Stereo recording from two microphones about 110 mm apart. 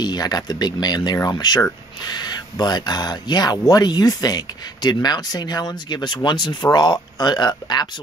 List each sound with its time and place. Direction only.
0.0 s speech: 40° left (ahead or behind)